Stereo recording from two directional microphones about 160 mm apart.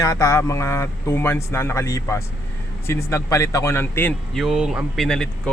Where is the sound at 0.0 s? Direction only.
20° left (ahead or behind).